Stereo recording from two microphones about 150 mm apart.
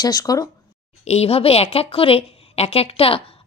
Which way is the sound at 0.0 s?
25° left (ahead or behind).